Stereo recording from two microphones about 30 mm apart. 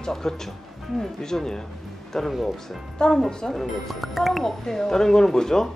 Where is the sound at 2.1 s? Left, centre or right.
Centre.